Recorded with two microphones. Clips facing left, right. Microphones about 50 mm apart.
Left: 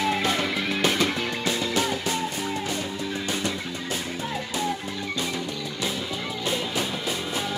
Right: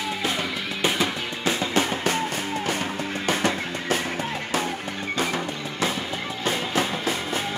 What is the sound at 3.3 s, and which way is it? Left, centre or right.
Music, right.